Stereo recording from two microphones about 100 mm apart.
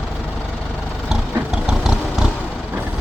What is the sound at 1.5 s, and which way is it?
Vehicle, 5° right (ahead or behind).